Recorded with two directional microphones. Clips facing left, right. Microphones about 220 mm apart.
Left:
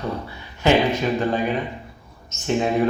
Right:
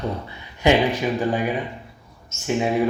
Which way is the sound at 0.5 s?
15° right (ahead or behind).